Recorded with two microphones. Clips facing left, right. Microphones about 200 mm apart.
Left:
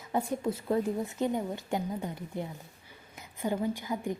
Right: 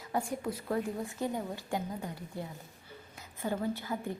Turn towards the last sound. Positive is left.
turn(degrees=15)  # may be behind; listen again after turning